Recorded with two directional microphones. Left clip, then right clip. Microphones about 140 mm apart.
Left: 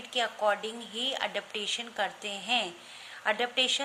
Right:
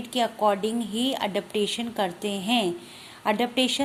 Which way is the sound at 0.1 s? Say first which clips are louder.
Right 5 dB; 25° right (ahead or behind).